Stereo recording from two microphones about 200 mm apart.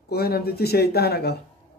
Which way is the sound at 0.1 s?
50° left (ahead or behind).